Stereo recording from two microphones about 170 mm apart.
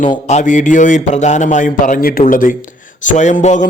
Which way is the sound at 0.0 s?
45° left (ahead or behind).